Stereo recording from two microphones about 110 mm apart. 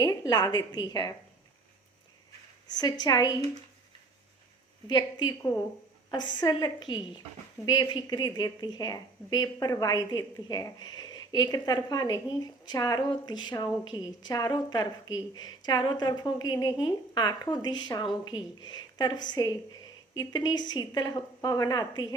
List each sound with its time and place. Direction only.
0.0 s a woman's voice: 40° left (ahead or behind)
2.7 s a woman's voice: 40° left (ahead or behind)
4.9 s a woman's voice: 40° left (ahead or behind)